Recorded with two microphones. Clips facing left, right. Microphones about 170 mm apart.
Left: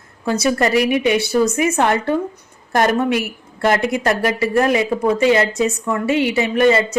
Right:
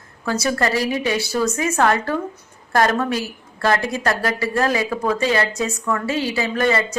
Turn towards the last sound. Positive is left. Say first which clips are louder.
# left 5 dB
turn(degrees=20)  # may be behind; listen again after turning